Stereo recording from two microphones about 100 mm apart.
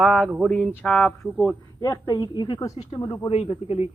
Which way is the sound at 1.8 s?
40° left (ahead or behind).